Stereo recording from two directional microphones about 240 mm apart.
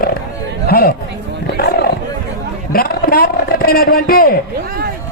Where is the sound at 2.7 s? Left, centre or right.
Left.